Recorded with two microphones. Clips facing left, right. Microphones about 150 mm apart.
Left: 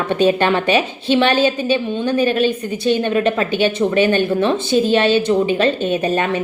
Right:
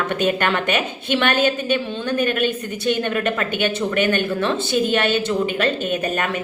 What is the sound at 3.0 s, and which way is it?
A woman's voice, 25° left (ahead or behind).